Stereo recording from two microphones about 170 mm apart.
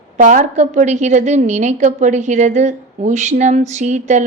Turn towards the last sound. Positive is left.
turn(degrees=-45)  # may be behind; listen again after turning